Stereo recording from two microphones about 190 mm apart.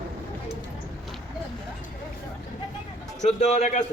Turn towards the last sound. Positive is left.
turn(degrees=40)  # may be behind; listen again after turning